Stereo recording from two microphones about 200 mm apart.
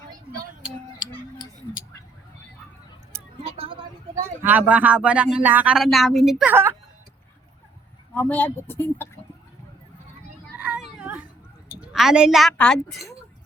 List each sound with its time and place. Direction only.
3.4 s a sound: 30° right (ahead or behind)
4.1 s speech: 10° right (ahead or behind)
8.1 s speech: 10° left (ahead or behind)
10.6 s children playing: 5° right (ahead or behind)
11.7 s a woman's voice: 5° right (ahead or behind)